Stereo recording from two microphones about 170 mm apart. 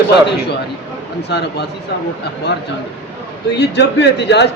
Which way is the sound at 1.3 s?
75° left (ahead or behind).